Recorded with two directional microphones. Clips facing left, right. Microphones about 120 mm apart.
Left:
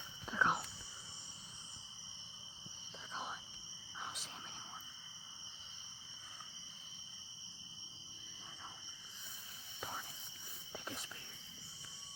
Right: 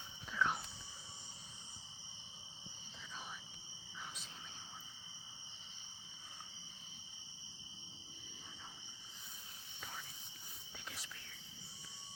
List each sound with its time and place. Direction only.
0.3 s whispering: 35° left (ahead or behind)
3.1 s whispering: 50° left (ahead or behind)
10.7 s whispering: 40° left (ahead or behind)